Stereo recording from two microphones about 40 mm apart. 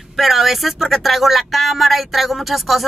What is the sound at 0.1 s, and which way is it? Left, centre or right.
Speech, centre.